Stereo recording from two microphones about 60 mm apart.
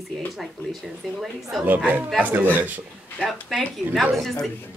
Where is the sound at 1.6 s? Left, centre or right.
Right.